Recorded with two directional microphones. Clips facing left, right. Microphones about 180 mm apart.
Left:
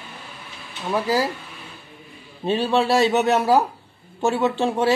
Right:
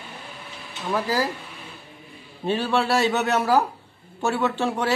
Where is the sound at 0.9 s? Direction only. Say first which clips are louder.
Left 3 dB; 15° left (ahead or behind).